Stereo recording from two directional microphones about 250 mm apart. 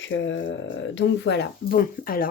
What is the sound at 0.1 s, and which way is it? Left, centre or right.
Speech, left.